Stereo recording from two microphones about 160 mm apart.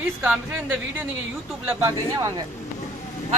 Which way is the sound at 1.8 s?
20° right (ahead or behind).